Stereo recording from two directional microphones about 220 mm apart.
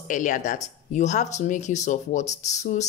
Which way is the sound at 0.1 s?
35° left (ahead or behind).